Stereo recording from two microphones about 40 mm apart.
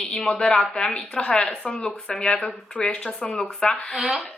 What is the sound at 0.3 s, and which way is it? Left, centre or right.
A woman's voice, left.